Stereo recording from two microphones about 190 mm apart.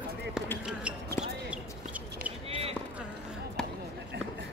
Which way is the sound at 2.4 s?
30° right (ahead or behind).